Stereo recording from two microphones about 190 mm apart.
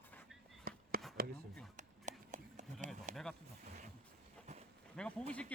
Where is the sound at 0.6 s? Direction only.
50° right (ahead or behind).